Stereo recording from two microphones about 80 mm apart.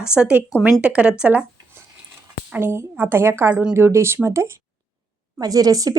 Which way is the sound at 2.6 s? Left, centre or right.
Right.